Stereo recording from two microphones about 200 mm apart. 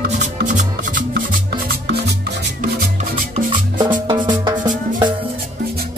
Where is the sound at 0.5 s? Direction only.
40° right (ahead or behind).